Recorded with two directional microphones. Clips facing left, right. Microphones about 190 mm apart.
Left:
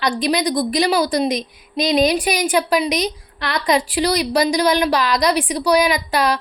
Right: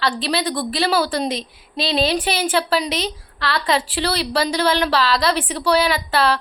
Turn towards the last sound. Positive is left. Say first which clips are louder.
# left 1 dB
turn(degrees=15)  # may be behind; listen again after turning